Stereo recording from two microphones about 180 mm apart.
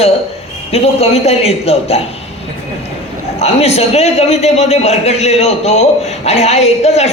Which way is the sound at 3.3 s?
35° left (ahead or behind).